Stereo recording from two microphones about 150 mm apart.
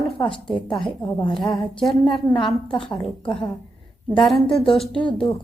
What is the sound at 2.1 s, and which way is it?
Speech, 35° left (ahead or behind).